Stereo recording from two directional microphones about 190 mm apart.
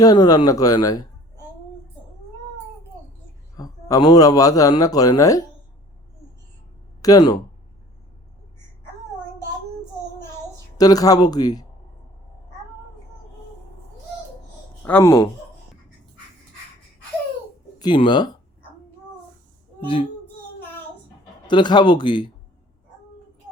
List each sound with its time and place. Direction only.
0.0 s a man's voice: 20° left (ahead or behind)
3.6 s a man's voice: 20° left (ahead or behind)
7.0 s a man's voice: 20° left (ahead or behind)
10.8 s a man's voice: 20° left (ahead or behind)
14.8 s speech: 15° left (ahead or behind)
17.7 s speech: 25° left (ahead or behind)
21.4 s a man's voice: 25° left (ahead or behind)